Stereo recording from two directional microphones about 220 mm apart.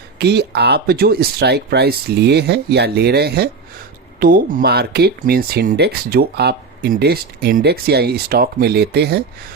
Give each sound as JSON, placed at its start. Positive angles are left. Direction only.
{"t": 0.2, "sound": "speech", "side_deg": -50}